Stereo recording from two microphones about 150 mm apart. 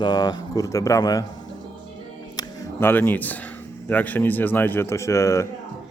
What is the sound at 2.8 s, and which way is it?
Speech, 15° left (ahead or behind).